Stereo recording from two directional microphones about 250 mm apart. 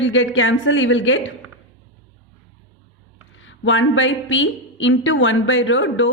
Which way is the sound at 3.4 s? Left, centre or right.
Left.